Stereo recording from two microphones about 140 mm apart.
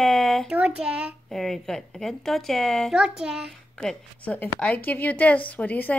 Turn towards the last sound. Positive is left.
turn(degrees=10)  # may be behind; listen again after turning